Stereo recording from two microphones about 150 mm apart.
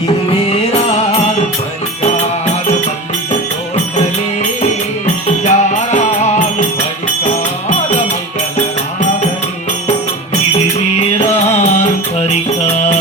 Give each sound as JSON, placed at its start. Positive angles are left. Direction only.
{"t": 5.4, "sound": "music", "side_deg": 50}
{"t": 11.5, "sound": "music", "side_deg": 45}